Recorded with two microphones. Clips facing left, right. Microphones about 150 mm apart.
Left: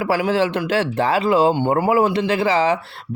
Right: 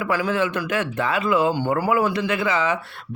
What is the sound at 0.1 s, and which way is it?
A man's voice, 30° left (ahead or behind).